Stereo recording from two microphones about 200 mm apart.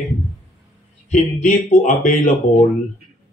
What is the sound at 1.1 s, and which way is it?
Speech, 35° left (ahead or behind).